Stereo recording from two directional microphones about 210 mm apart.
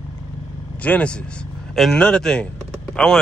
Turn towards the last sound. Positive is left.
turn(degrees=5)  # may be behind; listen again after turning